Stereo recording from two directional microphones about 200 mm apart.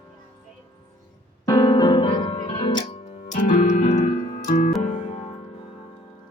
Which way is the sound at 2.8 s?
35° left (ahead or behind).